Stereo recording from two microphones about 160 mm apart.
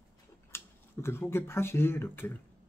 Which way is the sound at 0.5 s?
15° left (ahead or behind).